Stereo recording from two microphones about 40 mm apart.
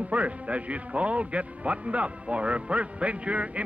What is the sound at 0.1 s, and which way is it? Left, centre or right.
A man's voice, right.